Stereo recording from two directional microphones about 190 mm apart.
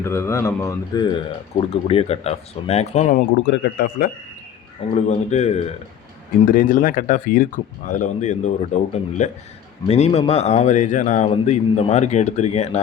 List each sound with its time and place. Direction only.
0.0 s speech: 15° left (ahead or behind)
1.1 s a man's voice: 30° left (ahead or behind)
3.5 s speech: 60° left (ahead or behind)
4.9 s a man's voice: 35° left (ahead or behind)